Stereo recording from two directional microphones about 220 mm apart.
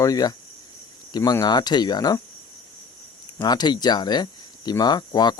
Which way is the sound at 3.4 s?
20° left (ahead or behind).